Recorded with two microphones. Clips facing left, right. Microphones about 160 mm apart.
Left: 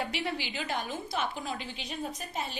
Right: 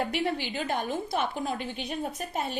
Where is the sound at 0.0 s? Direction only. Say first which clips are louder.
Right 5 dB; 50° right (ahead or behind).